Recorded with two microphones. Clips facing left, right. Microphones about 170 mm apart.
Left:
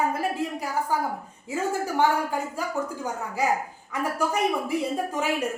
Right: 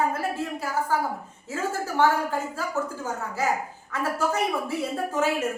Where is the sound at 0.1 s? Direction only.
15° left (ahead or behind).